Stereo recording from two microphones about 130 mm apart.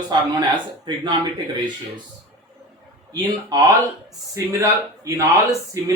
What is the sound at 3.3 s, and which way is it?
Speech, 30° right (ahead or behind).